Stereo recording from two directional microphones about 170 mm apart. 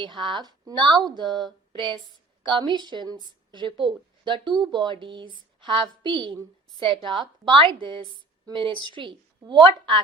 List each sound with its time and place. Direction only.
0.0 s a woman's voice: 30° right (ahead or behind)